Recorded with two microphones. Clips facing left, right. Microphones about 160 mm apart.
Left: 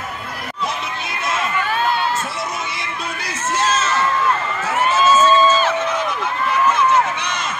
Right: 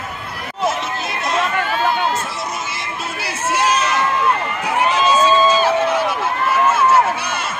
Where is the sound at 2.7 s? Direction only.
5° right (ahead or behind).